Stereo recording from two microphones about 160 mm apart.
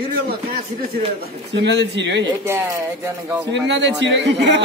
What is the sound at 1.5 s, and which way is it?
Speech, 90° right.